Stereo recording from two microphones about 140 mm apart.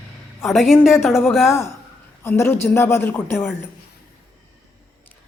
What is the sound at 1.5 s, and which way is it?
A man's voice, 20° left (ahead or behind).